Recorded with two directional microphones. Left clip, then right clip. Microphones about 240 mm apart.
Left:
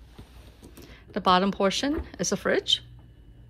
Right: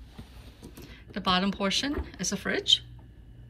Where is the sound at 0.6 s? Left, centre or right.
Centre.